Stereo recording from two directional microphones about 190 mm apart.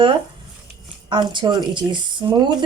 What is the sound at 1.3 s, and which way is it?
Speech, 25° right (ahead or behind).